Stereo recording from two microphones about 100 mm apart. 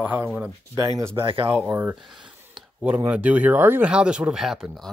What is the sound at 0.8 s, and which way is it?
Speech, 35° right (ahead or behind).